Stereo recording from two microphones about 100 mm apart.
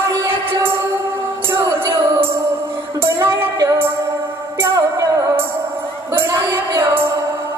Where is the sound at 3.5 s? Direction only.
35° right (ahead or behind).